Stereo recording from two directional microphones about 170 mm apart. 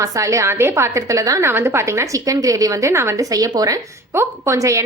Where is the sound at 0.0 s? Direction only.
20° right (ahead or behind).